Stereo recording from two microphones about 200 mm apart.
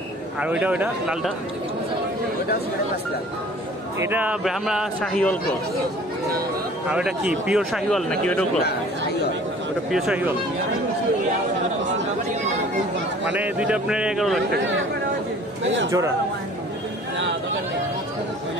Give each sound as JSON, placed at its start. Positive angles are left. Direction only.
{"t": 0.4, "sound": "speech", "side_deg": -5}
{"t": 4.0, "sound": "speech", "side_deg": -10}
{"t": 6.9, "sound": "speech", "side_deg": -5}
{"t": 9.9, "sound": "speech", "side_deg": -5}
{"t": 13.3, "sound": "speech", "side_deg": -5}
{"t": 15.6, "sound": "a man's voice", "side_deg": -70}